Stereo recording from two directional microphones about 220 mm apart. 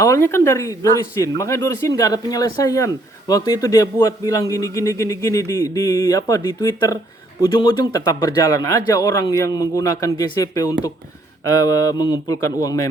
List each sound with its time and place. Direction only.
0.0 s speech: 15° left (ahead or behind)